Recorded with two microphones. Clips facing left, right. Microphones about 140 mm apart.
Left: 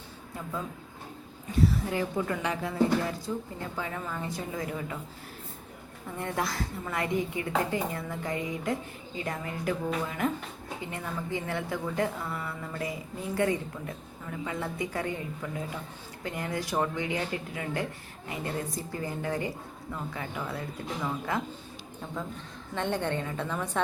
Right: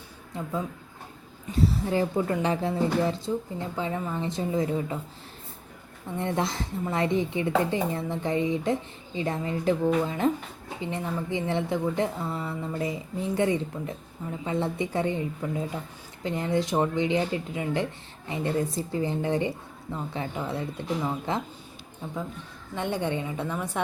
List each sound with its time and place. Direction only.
0.3 s speech: 20° right (ahead or behind)
1.9 s a woman's voice: 30° right (ahead or behind)
6.1 s a woman's voice: 25° right (ahead or behind)
22.0 s a woman's voice: 10° right (ahead or behind)